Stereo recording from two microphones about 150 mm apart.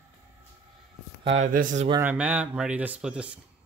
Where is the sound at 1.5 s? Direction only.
60° right (ahead or behind).